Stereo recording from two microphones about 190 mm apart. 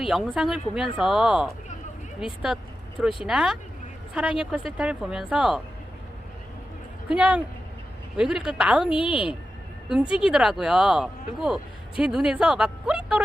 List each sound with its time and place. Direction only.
0.0 s speech: centre (ahead or behind)
7.1 s speech: 5° right (ahead or behind)
9.0 s a woman's voice: 25° left (ahead or behind)
9.9 s speech: 5° right (ahead or behind)